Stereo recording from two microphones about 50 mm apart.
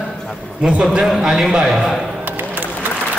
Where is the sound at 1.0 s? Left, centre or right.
Centre.